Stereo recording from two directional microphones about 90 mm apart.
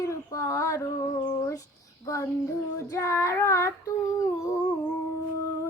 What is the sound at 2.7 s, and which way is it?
Female singing, 35° left (ahead or behind).